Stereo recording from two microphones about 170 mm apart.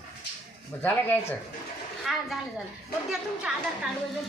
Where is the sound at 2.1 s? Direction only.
Centre (ahead or behind).